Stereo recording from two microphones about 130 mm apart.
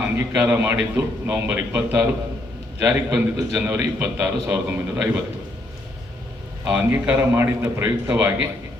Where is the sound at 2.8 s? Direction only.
25° right (ahead or behind).